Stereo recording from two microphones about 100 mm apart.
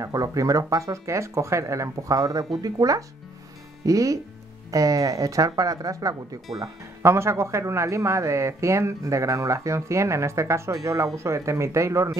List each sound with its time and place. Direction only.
0.0 s a man's voice: 35° right (ahead or behind)